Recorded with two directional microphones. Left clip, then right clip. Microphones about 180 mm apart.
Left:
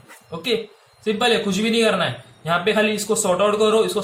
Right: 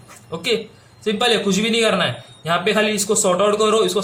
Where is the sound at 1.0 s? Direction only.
35° right (ahead or behind).